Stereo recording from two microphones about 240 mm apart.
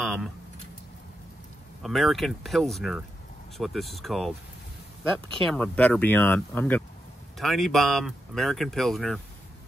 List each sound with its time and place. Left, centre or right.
0.0 s a sound: centre
1.8 s speech: centre
5.4 s speech: centre